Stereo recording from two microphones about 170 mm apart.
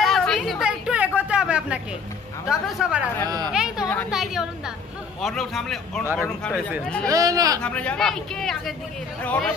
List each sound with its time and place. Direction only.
0.0 s chatter: centre (ahead or behind)
2.4 s speech: 5° right (ahead or behind)
3.3 s speech: 25° right (ahead or behind)
3.5 s a sound: 5° right (ahead or behind)
4.1 s speech: 5° right (ahead or behind)
7.1 s speech: 20° right (ahead or behind)
7.6 s speech: 5° left (ahead or behind)